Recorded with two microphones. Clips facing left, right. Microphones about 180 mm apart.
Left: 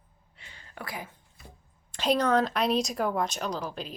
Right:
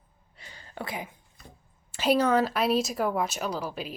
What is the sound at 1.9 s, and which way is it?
A woman's voice, 5° right (ahead or behind).